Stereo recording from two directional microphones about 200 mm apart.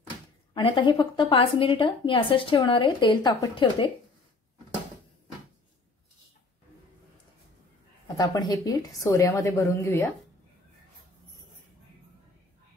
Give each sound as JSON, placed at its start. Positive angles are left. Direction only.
{"t": 0.6, "sound": "a woman's voice", "side_deg": 25}
{"t": 8.2, "sound": "a woman's voice", "side_deg": 20}